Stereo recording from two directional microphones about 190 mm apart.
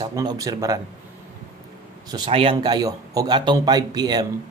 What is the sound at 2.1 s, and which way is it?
A man's voice, 25° right (ahead or behind).